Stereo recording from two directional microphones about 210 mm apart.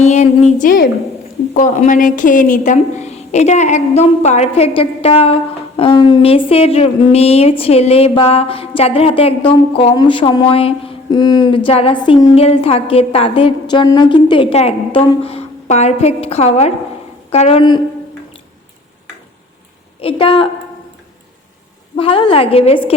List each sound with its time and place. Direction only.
0.0 s a woman's voice: 35° left (ahead or behind)
20.0 s a woman's voice: 25° left (ahead or behind)
21.9 s a woman's voice: 25° left (ahead or behind)